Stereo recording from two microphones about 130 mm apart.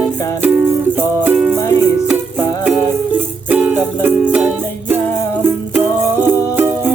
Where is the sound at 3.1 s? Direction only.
10° right (ahead or behind).